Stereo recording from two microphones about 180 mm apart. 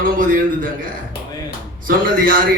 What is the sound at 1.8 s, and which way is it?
Speech, 50° right (ahead or behind).